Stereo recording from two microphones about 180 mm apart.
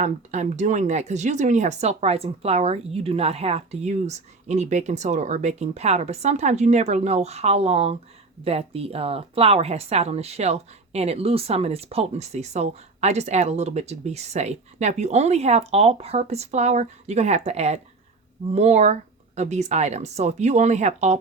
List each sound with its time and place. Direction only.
0.0 s speech: 40° right (ahead or behind)